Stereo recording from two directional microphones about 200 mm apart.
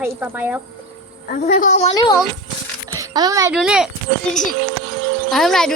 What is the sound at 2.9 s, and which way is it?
Music, 15° right (ahead or behind).